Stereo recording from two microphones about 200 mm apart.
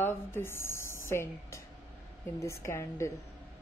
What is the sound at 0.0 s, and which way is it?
Speech, 10° left (ahead or behind).